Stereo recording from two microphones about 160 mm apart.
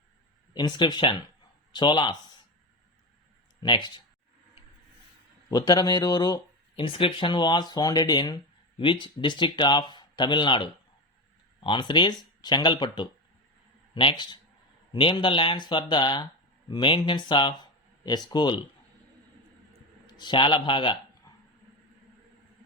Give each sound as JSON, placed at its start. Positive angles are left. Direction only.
{"t": 0.5, "sound": "speech", "side_deg": 25}
{"t": 3.6, "sound": "speech", "side_deg": 30}
{"t": 5.5, "sound": "speech", "side_deg": 25}
{"t": 20.1, "sound": "a man's voice", "side_deg": 25}